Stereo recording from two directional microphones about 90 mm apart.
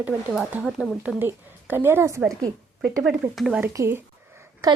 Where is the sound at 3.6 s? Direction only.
30° right (ahead or behind).